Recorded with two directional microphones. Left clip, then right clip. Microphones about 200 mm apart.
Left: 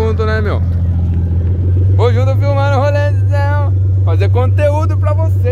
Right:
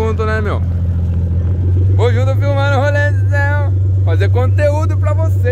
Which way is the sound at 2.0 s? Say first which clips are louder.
Left 2 dB; 5° left (ahead or behind).